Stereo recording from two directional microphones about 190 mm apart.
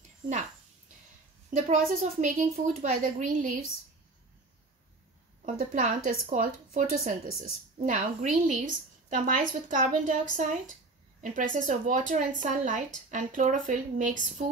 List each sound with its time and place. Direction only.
1.5 s a woman's voice: 40° right (ahead or behind)
5.4 s speech: 45° right (ahead or behind)